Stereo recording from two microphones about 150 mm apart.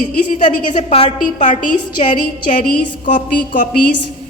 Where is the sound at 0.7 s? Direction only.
50° left (ahead or behind).